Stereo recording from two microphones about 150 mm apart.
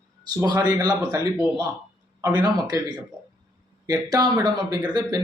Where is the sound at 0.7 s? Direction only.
25° right (ahead or behind).